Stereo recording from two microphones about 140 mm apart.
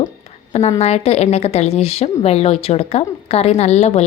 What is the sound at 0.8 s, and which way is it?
A woman's voice, 50° left (ahead or behind).